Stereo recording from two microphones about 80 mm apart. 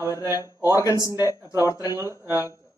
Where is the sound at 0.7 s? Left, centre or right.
Left.